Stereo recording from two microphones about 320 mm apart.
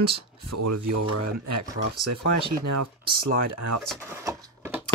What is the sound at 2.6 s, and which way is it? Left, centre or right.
Speech, right.